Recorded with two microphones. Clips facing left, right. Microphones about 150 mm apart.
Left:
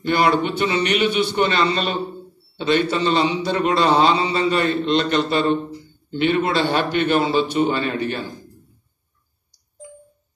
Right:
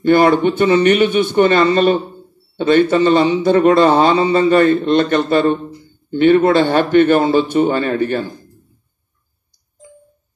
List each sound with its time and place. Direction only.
0.0 s a man's voice: 50° right (ahead or behind)